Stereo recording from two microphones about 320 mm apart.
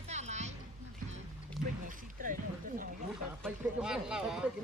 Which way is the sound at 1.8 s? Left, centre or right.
Right.